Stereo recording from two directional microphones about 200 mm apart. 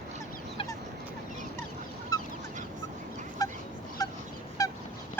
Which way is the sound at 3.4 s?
20° left (ahead or behind).